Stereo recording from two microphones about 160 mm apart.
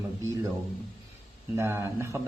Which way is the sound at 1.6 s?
15° right (ahead or behind).